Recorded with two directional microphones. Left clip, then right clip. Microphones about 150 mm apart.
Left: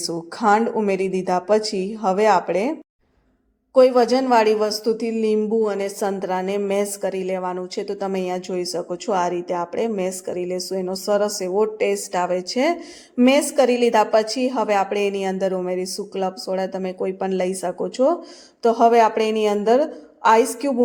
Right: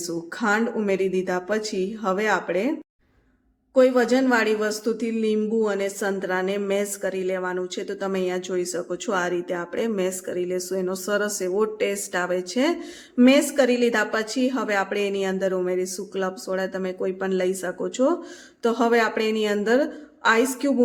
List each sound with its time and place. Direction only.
0.1 s speech: 20° left (ahead or behind)
3.8 s a woman's voice: 20° left (ahead or behind)